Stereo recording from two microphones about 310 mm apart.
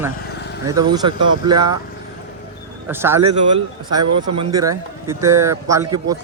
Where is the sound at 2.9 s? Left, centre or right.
Centre.